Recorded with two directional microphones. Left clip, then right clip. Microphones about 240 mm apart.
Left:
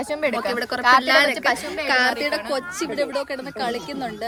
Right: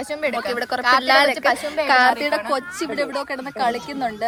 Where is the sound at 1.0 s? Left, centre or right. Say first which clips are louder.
Right 2 dB; centre; by 4.1 s right.